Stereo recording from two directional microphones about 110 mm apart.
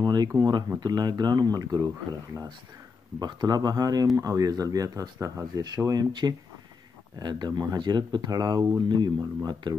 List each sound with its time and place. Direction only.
0.0 s speech: 35° right (ahead or behind)
3.2 s speech: 40° right (ahead or behind)